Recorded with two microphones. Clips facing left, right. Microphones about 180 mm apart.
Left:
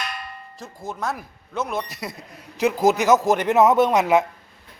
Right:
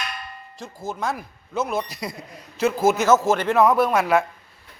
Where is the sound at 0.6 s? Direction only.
Centre (ahead or behind).